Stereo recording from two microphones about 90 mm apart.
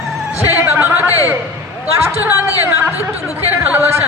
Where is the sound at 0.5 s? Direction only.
20° right (ahead or behind).